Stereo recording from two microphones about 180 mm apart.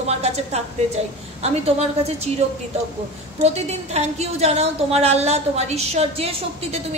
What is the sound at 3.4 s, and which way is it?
A woman's voice, 35° right (ahead or behind).